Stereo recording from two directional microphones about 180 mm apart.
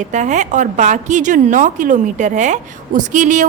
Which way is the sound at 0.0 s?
40° right (ahead or behind).